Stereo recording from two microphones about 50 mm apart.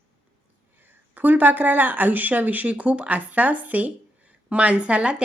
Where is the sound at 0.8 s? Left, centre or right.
Right.